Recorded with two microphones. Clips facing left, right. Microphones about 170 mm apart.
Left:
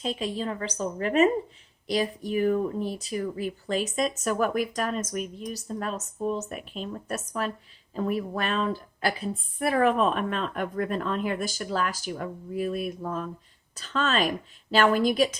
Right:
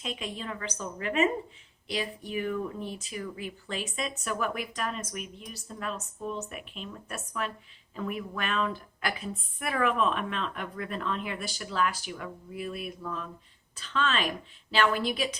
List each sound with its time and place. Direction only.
0.0 s a woman's voice: 35° left (ahead or behind)